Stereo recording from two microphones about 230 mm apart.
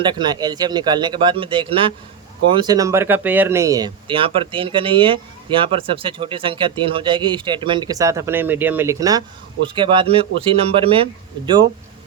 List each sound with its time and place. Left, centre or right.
0.0 s speech: centre